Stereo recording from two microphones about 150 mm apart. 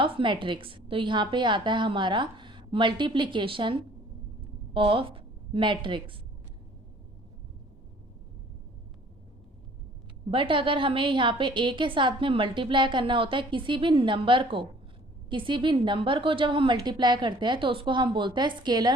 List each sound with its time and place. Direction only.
0.0 s a woman's voice: 35° right (ahead or behind)
10.3 s a woman's voice: 35° right (ahead or behind)